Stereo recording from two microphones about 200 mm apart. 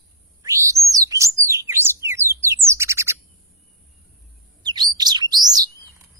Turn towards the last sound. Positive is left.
turn(degrees=-20)  # may be behind; listen again after turning